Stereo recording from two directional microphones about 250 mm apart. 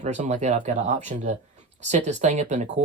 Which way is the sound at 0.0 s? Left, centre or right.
Right.